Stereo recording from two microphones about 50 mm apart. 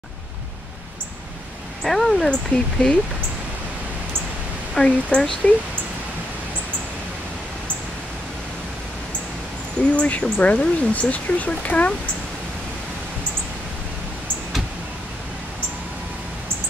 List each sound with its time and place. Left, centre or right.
1.8 s speech: centre
2.5 s speech: left
4.7 s speech: centre
9.9 s speech: left